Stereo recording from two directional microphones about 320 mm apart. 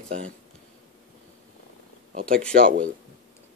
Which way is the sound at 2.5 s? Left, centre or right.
Right.